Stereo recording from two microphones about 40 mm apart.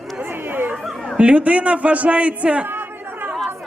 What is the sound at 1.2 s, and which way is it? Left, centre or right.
A man's voice, right.